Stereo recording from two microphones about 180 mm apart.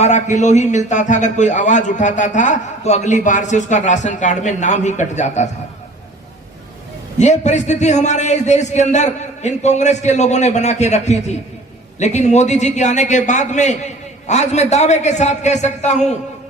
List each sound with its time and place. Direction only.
0.0 s a man's voice: 40° left (ahead or behind)
7.2 s a man's voice: 40° left (ahead or behind)